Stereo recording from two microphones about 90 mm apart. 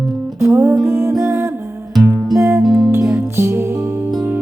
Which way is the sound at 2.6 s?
Centre (ahead or behind).